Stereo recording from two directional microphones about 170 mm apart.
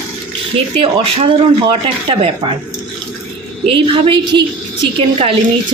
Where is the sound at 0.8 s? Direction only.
30° right (ahead or behind).